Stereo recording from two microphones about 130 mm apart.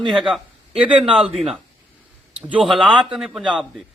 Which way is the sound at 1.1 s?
5° right (ahead or behind).